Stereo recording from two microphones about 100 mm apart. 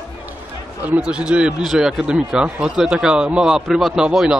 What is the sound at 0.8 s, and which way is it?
Speech, 15° right (ahead or behind).